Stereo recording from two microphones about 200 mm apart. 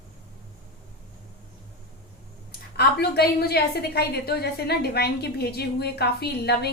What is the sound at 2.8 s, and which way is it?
A woman's voice, 55° left (ahead or behind).